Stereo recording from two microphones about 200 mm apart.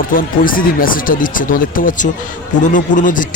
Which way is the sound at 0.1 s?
45° left (ahead or behind).